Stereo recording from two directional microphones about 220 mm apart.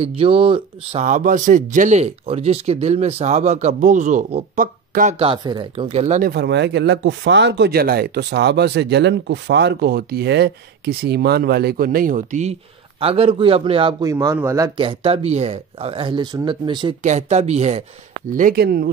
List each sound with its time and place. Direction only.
0.0 s speech: 25° right (ahead or behind)
5.2 s speech: 20° right (ahead or behind)
6.3 s speech: 50° right (ahead or behind); by 14.7 s 15° right (ahead or behind)
14.8 s speech: 25° right (ahead or behind)
17.0 s speech: 30° right (ahead or behind)
18.3 s speech: 40° right (ahead or behind)